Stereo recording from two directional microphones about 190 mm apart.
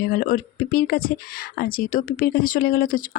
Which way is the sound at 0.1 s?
45° left (ahead or behind).